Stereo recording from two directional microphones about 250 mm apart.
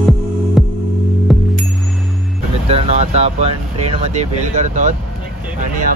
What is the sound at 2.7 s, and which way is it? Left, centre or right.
Vehicle, right.